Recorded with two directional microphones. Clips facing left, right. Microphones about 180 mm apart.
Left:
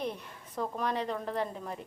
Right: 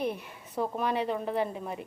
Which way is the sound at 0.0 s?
10° right (ahead or behind).